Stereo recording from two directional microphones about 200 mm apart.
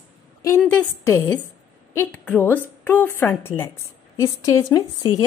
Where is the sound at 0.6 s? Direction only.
5° left (ahead or behind).